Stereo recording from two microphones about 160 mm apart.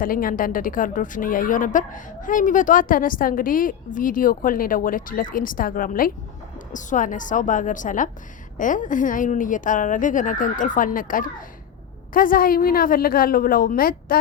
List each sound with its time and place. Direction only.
0.0 s a woman's voice: 60° left (ahead or behind)